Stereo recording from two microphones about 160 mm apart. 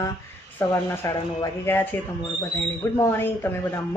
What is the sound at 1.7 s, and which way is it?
Speech, 15° left (ahead or behind).